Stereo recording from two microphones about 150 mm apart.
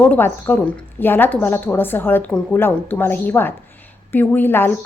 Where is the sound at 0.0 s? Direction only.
15° left (ahead or behind).